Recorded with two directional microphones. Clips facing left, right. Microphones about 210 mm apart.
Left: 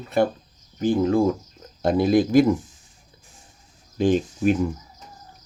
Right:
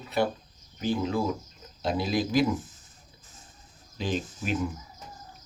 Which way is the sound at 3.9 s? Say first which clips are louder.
Left 11 dB; 50° left (ahead or behind).